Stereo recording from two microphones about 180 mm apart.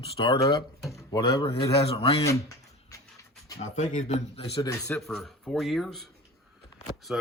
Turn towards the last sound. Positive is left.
turn(degrees=-5)  # may be behind; listen again after turning